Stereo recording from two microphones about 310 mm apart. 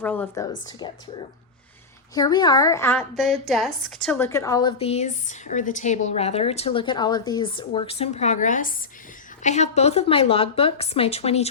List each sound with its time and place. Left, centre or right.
0.0 s a woman's voice: centre
2.1 s a woman's voice: centre